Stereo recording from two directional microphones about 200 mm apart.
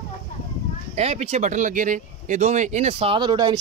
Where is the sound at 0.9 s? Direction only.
30° right (ahead or behind).